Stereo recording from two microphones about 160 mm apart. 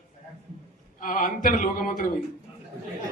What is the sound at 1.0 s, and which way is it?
A man's voice, 60° left (ahead or behind).